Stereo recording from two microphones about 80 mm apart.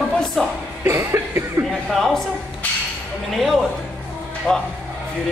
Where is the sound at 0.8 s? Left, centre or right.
Right.